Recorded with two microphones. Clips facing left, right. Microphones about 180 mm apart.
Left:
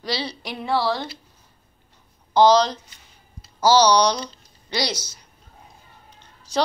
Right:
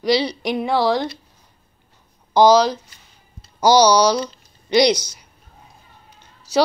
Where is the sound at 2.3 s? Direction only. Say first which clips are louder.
Right 3 dB; 10° right (ahead or behind).